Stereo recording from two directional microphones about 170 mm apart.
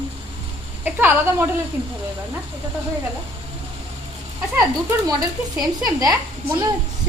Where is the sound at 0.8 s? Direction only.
10° right (ahead or behind).